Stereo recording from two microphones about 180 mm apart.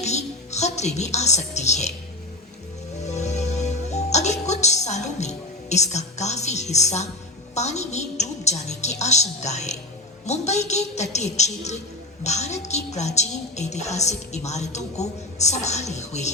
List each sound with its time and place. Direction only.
0.0 s speech: 40° left (ahead or behind)
3.0 s music: 40° left (ahead or behind)
10.2 s a woman's voice: 40° left (ahead or behind)